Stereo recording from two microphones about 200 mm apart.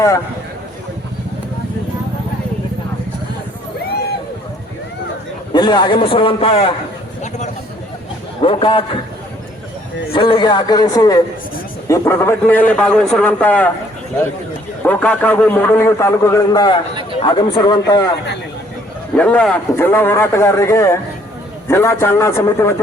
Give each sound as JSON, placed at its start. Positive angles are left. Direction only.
{"t": 5.5, "sound": "a man's voice", "side_deg": 20}
{"t": 7.2, "sound": "a sound", "side_deg": 35}
{"t": 8.4, "sound": "a man's voice", "side_deg": 25}
{"t": 10.1, "sound": "a man's voice", "side_deg": 25}
{"t": 14.8, "sound": "a man's voice", "side_deg": 5}
{"t": 19.1, "sound": "a man's voice", "side_deg": 5}